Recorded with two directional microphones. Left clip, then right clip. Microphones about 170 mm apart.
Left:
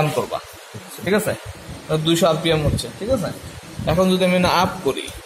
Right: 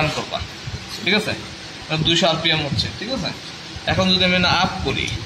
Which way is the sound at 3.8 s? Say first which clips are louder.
Even; 65° left (ahead or behind).